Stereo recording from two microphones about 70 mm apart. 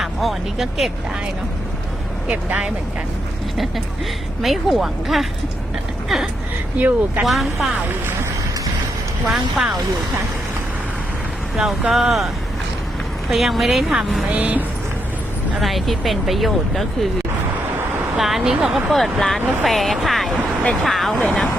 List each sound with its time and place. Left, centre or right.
0.0 s speech: centre
2.2 s speech: centre
4.4 s speech: centre
6.7 s speech: right
7.3 s speech: centre
9.3 s speech: centre
11.5 s speech: centre
13.3 s speech: centre
14.3 s speech: right
15.6 s speech: centre
18.2 s speech: centre